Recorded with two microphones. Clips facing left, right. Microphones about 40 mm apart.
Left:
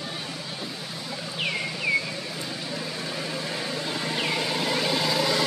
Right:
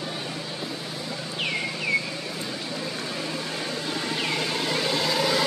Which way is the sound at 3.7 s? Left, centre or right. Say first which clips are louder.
Even; centre.